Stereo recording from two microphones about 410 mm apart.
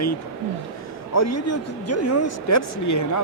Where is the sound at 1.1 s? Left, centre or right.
Left.